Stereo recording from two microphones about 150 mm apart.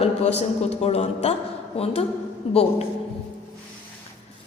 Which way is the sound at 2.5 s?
40° left (ahead or behind).